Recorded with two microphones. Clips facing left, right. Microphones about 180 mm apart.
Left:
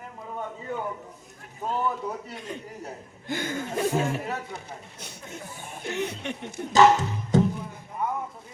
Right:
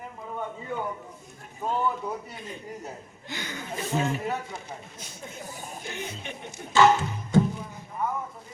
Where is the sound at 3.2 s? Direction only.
50° left (ahead or behind).